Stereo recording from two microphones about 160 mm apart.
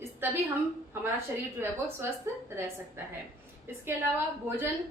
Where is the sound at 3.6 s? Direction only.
15° right (ahead or behind).